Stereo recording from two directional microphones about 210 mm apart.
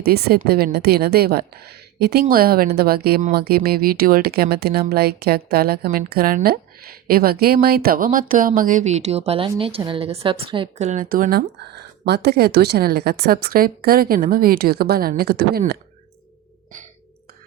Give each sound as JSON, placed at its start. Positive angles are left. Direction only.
{"t": 0.0, "sound": "speech", "side_deg": -50}